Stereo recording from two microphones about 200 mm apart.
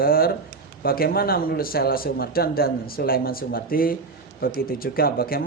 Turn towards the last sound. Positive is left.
turn(degrees=50)  # may be behind; listen again after turning